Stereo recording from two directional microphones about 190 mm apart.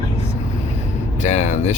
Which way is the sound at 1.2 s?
35° left (ahead or behind).